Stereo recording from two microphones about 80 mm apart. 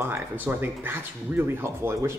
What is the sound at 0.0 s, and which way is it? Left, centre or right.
Speech, right.